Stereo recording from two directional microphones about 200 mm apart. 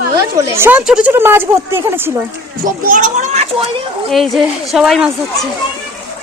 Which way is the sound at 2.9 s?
40° right (ahead or behind).